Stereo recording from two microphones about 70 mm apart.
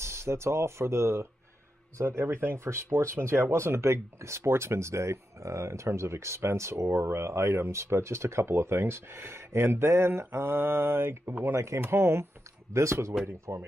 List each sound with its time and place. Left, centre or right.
0.0 s a man's voice: right
13.3 s speech: right